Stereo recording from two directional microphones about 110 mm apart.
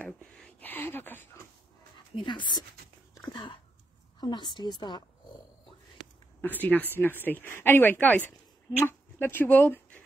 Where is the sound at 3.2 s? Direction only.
40° left (ahead or behind).